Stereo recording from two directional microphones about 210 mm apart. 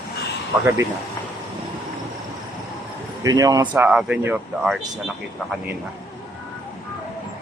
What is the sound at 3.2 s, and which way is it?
Speech, 15° right (ahead or behind).